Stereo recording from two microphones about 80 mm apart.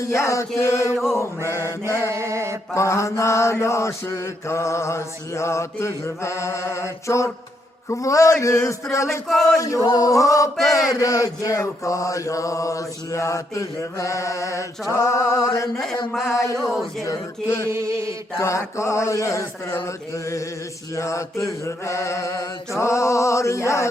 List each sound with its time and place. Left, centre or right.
0.0 s mantra: left
0.9 s speech: centre
1.5 s mantra: left
2.0 s a sound: right
2.7 s mantra: left
9.2 s speech: centre
9.6 s chant: left
11.6 s mantra: left
16.6 s speech: centre
17.1 s mantra: left
17.7 s chant: right
18.3 s mantra: left
20.9 s mantra: left